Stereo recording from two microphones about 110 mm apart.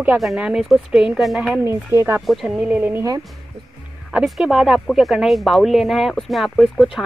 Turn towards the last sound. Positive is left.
turn(degrees=0)  # may be behind; listen again after turning